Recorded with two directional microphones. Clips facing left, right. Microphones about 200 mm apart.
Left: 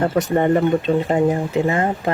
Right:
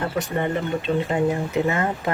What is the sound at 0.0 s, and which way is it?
Speech, 45° left (ahead or behind).